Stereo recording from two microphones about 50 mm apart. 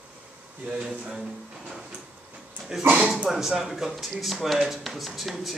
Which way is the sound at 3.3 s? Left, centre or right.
Centre.